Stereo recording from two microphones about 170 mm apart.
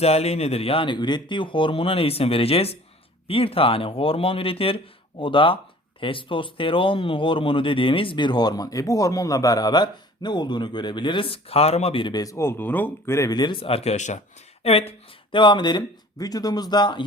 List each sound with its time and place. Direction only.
0.0 s speech: 35° left (ahead or behind)